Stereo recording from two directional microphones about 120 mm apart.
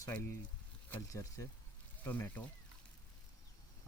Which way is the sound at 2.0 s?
15° left (ahead or behind).